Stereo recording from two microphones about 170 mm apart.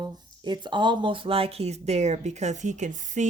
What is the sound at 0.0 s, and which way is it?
Speech, 25° right (ahead or behind).